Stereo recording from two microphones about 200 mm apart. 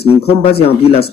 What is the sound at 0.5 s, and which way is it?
Speech, 30° left (ahead or behind).